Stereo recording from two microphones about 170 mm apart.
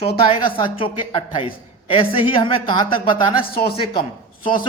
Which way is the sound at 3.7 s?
30° left (ahead or behind).